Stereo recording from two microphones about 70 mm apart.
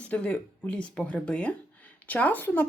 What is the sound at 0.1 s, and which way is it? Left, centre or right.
Speech, centre.